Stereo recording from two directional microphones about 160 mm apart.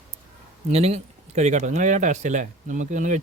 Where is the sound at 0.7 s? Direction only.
40° right (ahead or behind).